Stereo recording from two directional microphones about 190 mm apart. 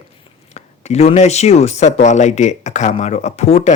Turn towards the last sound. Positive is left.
turn(degrees=35)  # may be behind; listen again after turning